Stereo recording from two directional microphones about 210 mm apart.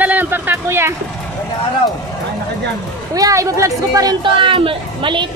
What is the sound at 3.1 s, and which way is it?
Speech, 15° right (ahead or behind).